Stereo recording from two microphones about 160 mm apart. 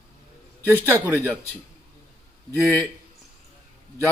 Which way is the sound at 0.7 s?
15° right (ahead or behind).